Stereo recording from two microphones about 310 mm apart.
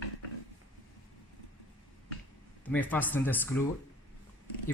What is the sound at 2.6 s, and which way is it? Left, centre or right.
Speech, centre.